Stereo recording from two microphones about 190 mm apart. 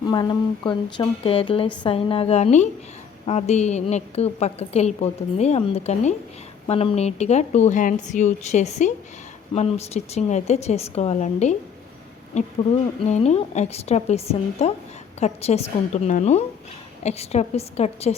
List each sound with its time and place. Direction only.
0.0 s a woman's voice: 25° left (ahead or behind)